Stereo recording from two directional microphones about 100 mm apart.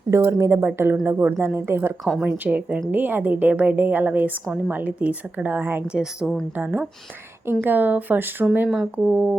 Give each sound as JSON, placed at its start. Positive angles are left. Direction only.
{"t": 0.1, "sound": "a woman's voice", "side_deg": -30}
{"t": 6.0, "sound": "a woman's voice", "side_deg": -5}
{"t": 6.6, "sound": "a woman's voice", "side_deg": -20}
{"t": 8.7, "sound": "a woman's voice", "side_deg": -5}